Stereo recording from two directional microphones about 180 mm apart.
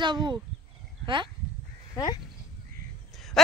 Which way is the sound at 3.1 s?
Centre (ahead or behind).